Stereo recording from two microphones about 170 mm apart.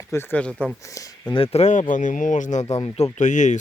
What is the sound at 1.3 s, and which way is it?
Speech, 35° left (ahead or behind).